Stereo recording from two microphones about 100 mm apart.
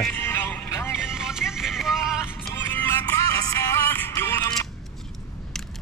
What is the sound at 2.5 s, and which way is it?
Music, 20° left (ahead or behind).